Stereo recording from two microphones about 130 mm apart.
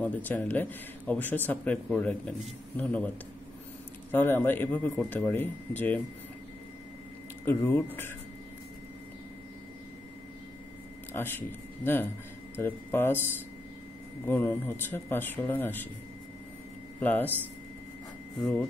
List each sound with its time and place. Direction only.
0.0 s speech: 15° left (ahead or behind)
4.1 s speech: 15° left (ahead or behind)
7.4 s speech: 15° left (ahead or behind)
11.1 s speech: 15° left (ahead or behind)
17.0 s speech: 15° left (ahead or behind)
18.4 s speech: 10° left (ahead or behind)